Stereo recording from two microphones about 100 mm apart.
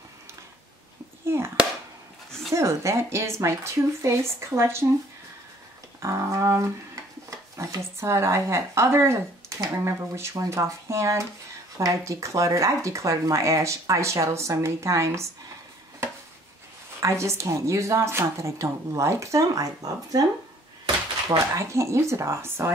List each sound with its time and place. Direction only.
1.2 s a child's voice: 25° right (ahead or behind)
2.5 s speech: 30° right (ahead or behind)
5.9 s speech: 30° right (ahead or behind)
17.0 s speech: 30° right (ahead or behind)
21.5 s speech: 30° right (ahead or behind)